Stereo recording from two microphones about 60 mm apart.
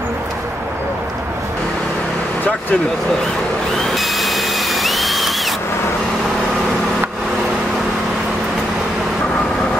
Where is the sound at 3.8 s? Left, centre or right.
Centre.